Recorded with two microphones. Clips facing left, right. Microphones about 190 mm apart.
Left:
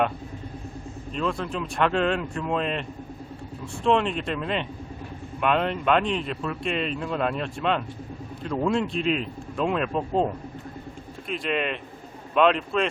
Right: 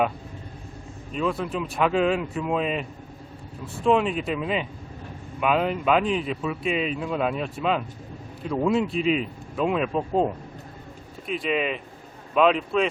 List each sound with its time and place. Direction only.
1.1 s speech: 5° right (ahead or behind)
3.8 s speech: 5° right (ahead or behind)